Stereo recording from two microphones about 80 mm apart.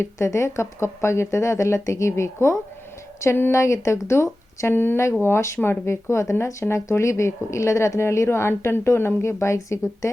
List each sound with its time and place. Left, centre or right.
0.0 s speech: left